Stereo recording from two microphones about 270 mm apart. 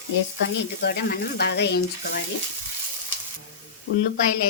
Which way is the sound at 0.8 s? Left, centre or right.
Left.